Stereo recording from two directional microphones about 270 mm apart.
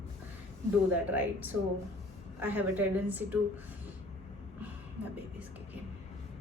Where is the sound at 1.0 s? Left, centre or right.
Centre.